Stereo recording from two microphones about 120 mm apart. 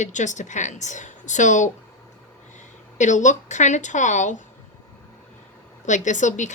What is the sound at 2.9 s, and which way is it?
Speech, 90° left.